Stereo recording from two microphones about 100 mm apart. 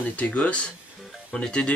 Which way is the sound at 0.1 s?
15° left (ahead or behind).